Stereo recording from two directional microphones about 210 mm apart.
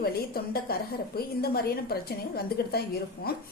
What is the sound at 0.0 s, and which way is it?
A woman's voice, 45° left (ahead or behind).